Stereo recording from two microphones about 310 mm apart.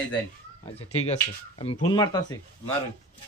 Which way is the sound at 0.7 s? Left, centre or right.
Left.